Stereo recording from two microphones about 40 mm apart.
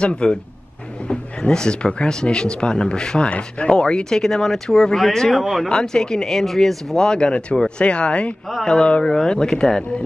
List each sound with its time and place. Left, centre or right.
0.0 s speech: left
5.3 s speech: centre
5.7 s speech: centre
7.0 s speech: centre
7.8 s speech: left
8.6 s speech: centre